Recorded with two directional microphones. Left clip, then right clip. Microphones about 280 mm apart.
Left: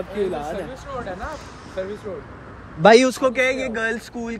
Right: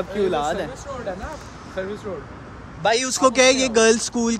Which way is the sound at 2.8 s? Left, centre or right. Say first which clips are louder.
Left 8 dB; centre.